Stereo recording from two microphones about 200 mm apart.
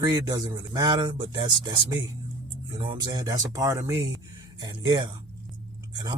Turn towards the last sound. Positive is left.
turn(degrees=-20)  # may be behind; listen again after turning